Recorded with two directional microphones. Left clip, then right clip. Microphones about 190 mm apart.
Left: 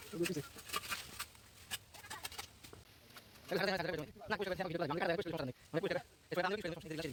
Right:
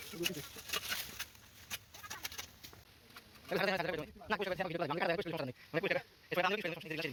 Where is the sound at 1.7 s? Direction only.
5° right (ahead or behind).